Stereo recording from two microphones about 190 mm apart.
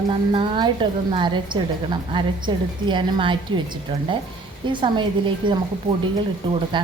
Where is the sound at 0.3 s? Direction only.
25° right (ahead or behind).